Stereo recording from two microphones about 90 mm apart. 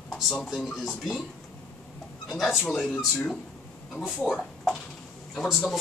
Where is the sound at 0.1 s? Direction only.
5° left (ahead or behind).